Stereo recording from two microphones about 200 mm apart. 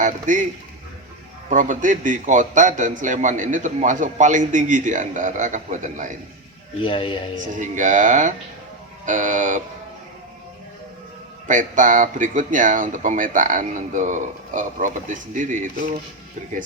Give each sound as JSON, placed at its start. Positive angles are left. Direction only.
{"t": 0.0, "sound": "a man's voice", "side_deg": -40}
{"t": 1.5, "sound": "a man's voice", "side_deg": -40}
{"t": 6.8, "sound": "speech", "side_deg": 25}
{"t": 7.6, "sound": "a man's voice", "side_deg": -40}
{"t": 11.4, "sound": "a man's voice", "side_deg": -40}